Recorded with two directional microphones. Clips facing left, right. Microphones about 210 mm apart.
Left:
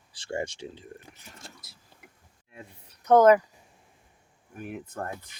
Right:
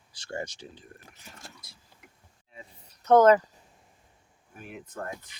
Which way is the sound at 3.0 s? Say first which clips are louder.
Left 1 dB; 10° left (ahead or behind).